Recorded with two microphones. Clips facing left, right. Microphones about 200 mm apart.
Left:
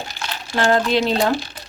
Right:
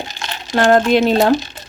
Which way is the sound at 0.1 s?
20° right (ahead or behind).